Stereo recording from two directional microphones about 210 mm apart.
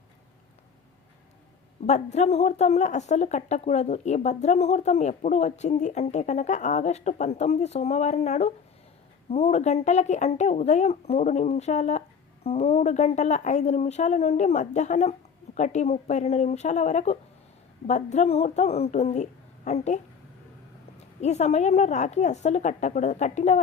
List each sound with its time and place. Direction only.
1.9 s speech: 30° left (ahead or behind)
21.2 s speech: 30° left (ahead or behind)